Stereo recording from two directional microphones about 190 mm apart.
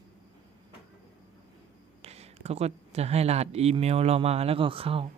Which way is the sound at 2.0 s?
35° right (ahead or behind).